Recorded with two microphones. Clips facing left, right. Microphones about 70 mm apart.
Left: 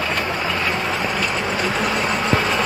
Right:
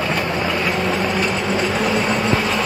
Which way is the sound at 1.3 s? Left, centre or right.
Centre.